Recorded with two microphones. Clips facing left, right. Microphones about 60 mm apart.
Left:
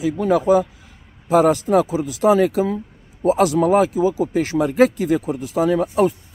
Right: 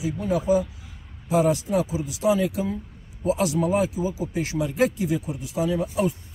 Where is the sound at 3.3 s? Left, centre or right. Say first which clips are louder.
Left 8 dB; left.